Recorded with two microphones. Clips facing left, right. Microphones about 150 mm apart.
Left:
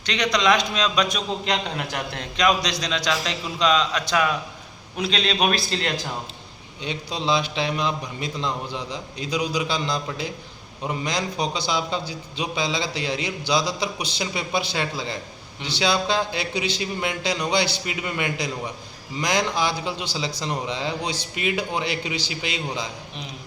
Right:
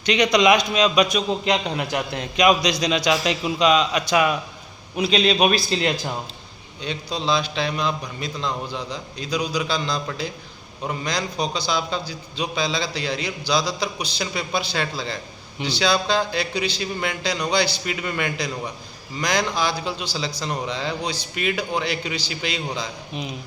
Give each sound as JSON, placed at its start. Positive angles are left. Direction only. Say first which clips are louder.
{"t": 0.0, "sound": "a man's voice", "louder": "right 5 dB", "side_deg": -10}
{"t": 6.8, "sound": "a man's voice", "louder": "right 1 dB", "side_deg": 20}